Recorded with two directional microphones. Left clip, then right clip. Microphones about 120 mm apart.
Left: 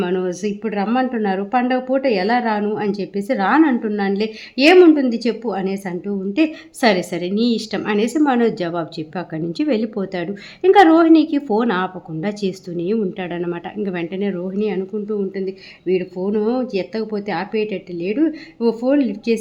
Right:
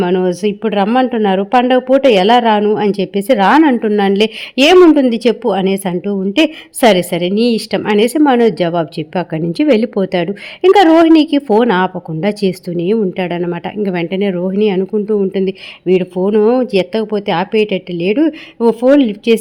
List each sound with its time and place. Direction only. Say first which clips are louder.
0.0 s speech: right 7 dB; 40° right (ahead or behind)
15.3 s speech: right 9 dB; 65° right (ahead or behind)